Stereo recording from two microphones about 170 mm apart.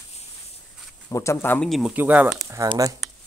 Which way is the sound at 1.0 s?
15° left (ahead or behind).